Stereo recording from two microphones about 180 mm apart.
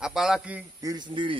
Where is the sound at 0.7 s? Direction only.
20° right (ahead or behind).